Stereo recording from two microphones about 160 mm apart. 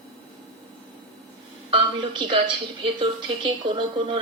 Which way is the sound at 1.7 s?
30° right (ahead or behind).